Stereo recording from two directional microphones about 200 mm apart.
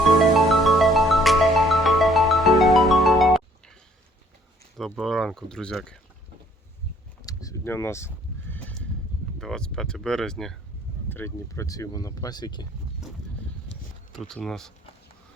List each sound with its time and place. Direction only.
0.2 s music: centre (ahead or behind)
4.8 s speech: centre (ahead or behind)
7.2 s neigh: 15° left (ahead or behind)
9.4 s speech: 5° left (ahead or behind); by 12.6 s 20° left (ahead or behind)
13.7 s a sound: 5° left (ahead or behind)